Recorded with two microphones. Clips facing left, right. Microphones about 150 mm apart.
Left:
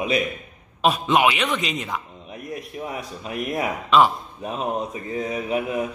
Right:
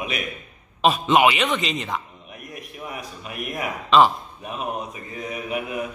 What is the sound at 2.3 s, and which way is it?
A man's voice, 25° left (ahead or behind).